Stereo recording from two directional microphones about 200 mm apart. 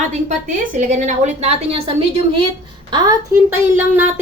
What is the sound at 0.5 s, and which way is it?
A woman's voice, 40° right (ahead or behind).